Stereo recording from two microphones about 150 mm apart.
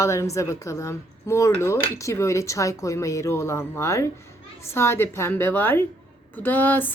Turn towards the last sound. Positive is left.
turn(degrees=15)  # may be behind; listen again after turning